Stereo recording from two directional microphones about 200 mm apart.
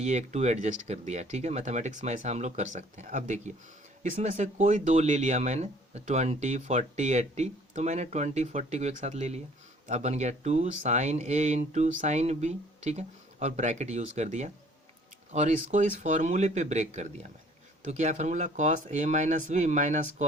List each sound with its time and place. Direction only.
0.0 s speech: 35° right (ahead or behind)